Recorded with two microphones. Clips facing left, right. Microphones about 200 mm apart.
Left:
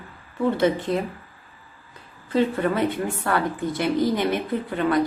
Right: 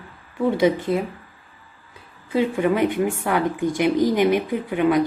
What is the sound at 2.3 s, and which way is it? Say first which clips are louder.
Speech: right 2 dB; 15° right (ahead or behind).